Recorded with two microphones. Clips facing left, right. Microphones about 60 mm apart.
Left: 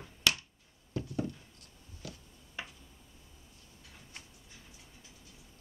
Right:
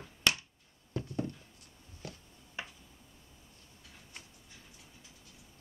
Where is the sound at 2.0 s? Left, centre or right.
Right.